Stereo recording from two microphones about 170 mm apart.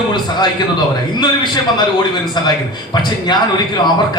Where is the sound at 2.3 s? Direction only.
25° left (ahead or behind).